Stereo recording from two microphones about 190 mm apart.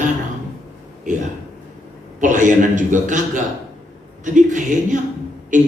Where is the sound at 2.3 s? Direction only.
40° right (ahead or behind).